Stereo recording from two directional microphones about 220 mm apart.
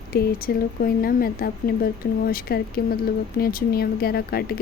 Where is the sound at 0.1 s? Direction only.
45° left (ahead or behind).